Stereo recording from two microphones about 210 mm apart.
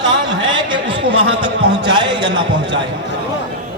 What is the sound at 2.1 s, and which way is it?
Speech, 20° right (ahead or behind).